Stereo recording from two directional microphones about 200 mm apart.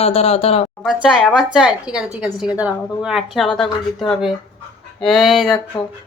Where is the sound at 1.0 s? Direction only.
Centre (ahead or behind).